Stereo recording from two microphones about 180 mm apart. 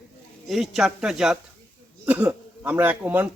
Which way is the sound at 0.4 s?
Centre (ahead or behind).